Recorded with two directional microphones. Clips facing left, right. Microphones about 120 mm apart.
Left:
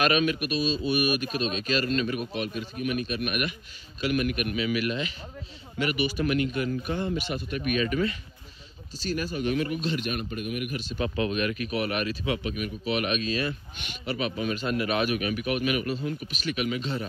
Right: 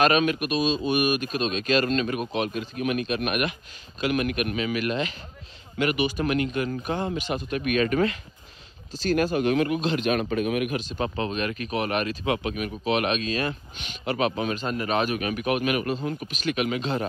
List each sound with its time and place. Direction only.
0.0 s a man's voice: 45° right (ahead or behind)
11.0 s a man's voice: 35° right (ahead or behind)